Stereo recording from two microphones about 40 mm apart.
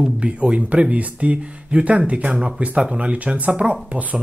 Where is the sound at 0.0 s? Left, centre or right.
Right.